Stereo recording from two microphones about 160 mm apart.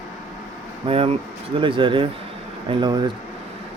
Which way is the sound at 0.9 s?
35° right (ahead or behind).